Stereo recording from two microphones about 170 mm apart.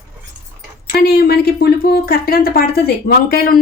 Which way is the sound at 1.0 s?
65° left (ahead or behind).